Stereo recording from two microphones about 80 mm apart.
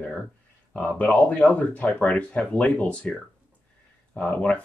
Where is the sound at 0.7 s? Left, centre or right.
Centre.